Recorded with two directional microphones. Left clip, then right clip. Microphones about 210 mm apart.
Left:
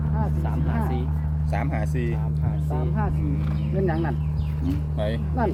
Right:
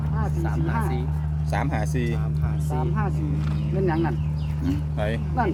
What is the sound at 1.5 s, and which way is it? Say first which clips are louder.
Speech: right 2 dB; 40° right (ahead or behind).